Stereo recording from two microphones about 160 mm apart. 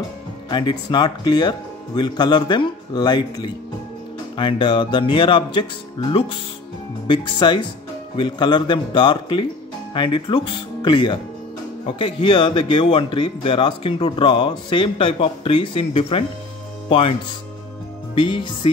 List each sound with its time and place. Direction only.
0.5 s speech: 30° left (ahead or behind)
18.1 s speech: 30° left (ahead or behind)